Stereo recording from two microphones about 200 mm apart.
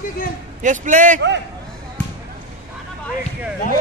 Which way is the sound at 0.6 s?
40° right (ahead or behind).